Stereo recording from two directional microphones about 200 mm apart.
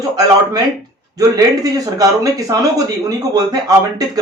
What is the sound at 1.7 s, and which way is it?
Speech, 20° right (ahead or behind).